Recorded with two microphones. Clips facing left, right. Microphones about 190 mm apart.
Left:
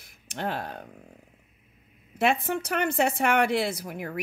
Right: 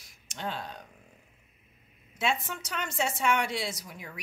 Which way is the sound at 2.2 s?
60° left (ahead or behind).